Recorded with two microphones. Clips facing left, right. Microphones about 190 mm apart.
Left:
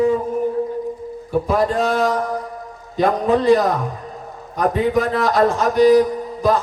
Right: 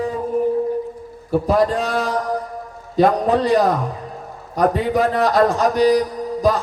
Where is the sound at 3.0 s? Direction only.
40° right (ahead or behind).